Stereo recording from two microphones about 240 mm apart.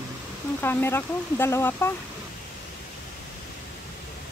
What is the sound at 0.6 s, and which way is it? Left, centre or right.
Speech, centre.